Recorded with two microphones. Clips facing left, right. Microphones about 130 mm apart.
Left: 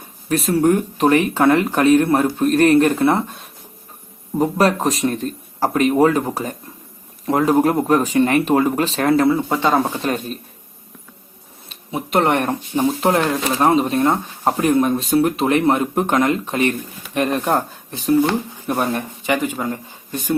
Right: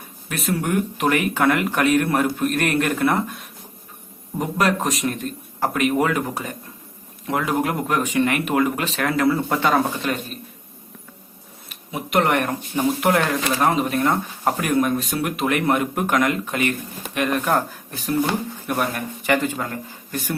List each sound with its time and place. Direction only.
0.3 s speech: 35° left (ahead or behind)
10.0 s speech: 35° left (ahead or behind)
11.7 s speech: 30° left (ahead or behind)
19.3 s speech: 15° left (ahead or behind)